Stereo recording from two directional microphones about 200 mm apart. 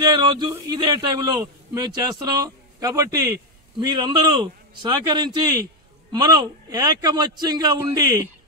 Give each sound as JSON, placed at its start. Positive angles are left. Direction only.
{"t": 0.1, "sound": "a man's voice", "side_deg": -20}